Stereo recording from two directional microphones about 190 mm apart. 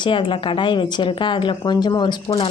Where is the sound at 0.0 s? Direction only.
25° left (ahead or behind).